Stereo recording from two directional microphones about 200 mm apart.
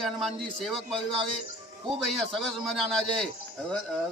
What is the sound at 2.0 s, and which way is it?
A man's voice, centre (ahead or behind).